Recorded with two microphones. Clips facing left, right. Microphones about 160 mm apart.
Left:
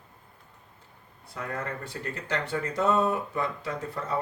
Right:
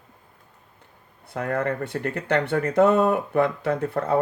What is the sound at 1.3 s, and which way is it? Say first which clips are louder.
Speech: right 9 dB; 60° right (ahead or behind).